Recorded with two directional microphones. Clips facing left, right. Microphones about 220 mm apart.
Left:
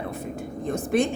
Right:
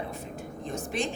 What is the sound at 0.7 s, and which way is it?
Speech, 55° left (ahead or behind).